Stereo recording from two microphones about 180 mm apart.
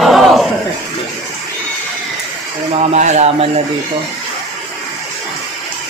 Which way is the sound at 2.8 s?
40° right (ahead or behind).